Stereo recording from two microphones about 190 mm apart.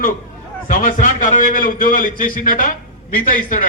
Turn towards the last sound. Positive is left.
turn(degrees=45)  # may be behind; listen again after turning